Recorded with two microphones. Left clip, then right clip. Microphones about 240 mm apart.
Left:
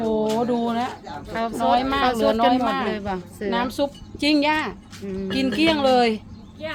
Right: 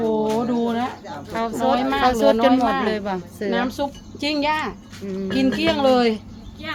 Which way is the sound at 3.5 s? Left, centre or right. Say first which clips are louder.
Even; left.